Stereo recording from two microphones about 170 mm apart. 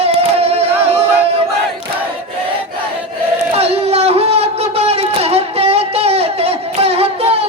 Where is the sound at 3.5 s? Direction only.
35° right (ahead or behind).